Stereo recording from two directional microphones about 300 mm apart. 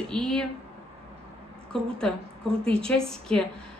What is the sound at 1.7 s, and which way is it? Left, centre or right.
Speech, centre.